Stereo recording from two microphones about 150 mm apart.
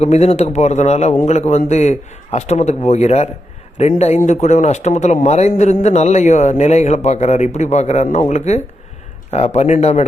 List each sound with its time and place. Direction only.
0.0 s a man's voice: 45° left (ahead or behind)